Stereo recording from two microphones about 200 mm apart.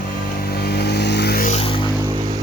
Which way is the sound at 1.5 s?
30° left (ahead or behind).